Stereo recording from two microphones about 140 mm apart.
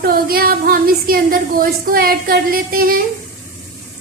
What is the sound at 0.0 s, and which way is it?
A woman's voice, 90° right.